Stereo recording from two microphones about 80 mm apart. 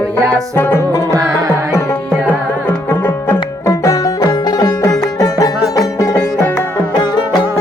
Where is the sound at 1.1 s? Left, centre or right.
Right.